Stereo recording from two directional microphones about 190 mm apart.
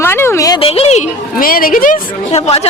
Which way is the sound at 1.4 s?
50° left (ahead or behind).